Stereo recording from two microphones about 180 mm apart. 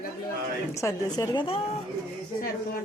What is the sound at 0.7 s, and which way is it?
Speech, 20° left (ahead or behind).